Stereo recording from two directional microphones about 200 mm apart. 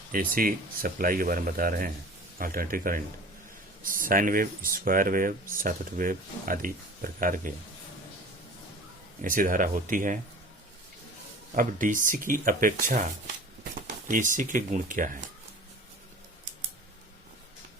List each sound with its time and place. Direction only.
0.1 s speech: 45° right (ahead or behind)
9.2 s speech: 40° right (ahead or behind)
11.5 s speech: 40° right (ahead or behind)
14.1 s speech: 40° right (ahead or behind)